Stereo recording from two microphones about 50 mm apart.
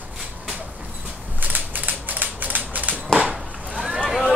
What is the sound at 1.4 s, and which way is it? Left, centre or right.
Typewriter, right.